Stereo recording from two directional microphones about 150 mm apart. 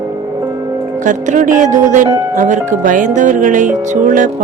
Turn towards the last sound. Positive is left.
turn(degrees=-60)  # may be behind; listen again after turning